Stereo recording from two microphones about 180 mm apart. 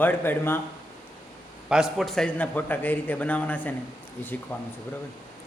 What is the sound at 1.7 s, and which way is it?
A man's voice, 5° right (ahead or behind).